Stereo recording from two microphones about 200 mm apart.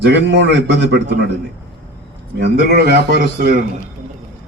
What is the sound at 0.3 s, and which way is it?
Speech, 60° right (ahead or behind).